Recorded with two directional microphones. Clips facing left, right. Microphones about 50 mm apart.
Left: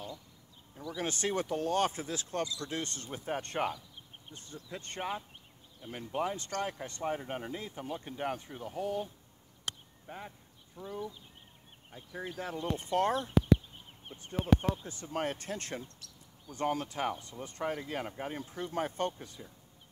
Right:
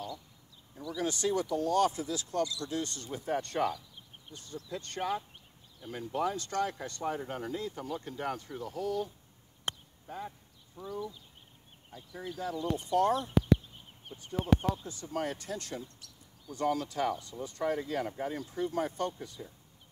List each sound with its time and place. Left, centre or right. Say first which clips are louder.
0.9 s speech: right 2 dB; left
9.7 s a sound: right 3 dB; right
10.0 s speech: right 4 dB; left
11.9 s speech: even; left
14.6 s speech: right 1 dB; left